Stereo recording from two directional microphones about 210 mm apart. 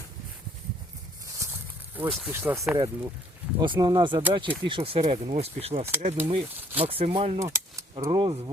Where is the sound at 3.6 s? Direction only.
20° right (ahead or behind).